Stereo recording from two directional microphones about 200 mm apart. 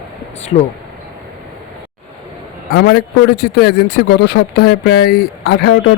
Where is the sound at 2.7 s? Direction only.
50° left (ahead or behind).